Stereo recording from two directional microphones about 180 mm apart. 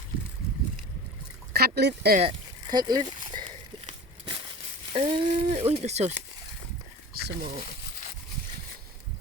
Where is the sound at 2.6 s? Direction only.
25° right (ahead or behind).